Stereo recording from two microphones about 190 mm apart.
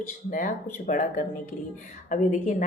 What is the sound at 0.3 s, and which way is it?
A woman's voice, 45° left (ahead or behind).